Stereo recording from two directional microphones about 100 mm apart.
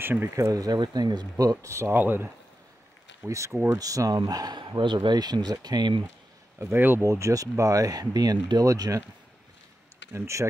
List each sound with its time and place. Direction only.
0.0 s speech: 20° right (ahead or behind)
0.5 s speech: 40° right (ahead or behind)
1.4 s speech: 35° right (ahead or behind)
3.3 s speech: 30° right (ahead or behind); by 6.0 s 45° right (ahead or behind)
6.6 s speech: 20° right (ahead or behind)
10.1 s speech: 30° right (ahead or behind)